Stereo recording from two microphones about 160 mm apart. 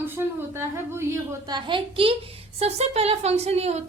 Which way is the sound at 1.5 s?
30° right (ahead or behind).